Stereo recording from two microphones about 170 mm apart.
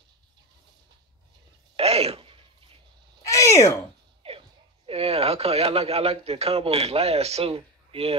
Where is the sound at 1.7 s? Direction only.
35° right (ahead or behind).